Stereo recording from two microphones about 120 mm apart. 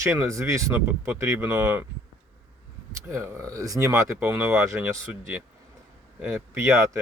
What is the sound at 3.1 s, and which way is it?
Speech, 20° right (ahead or behind).